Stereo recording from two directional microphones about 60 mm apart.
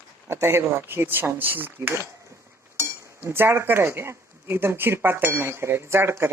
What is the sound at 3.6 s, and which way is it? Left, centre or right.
Speech, right.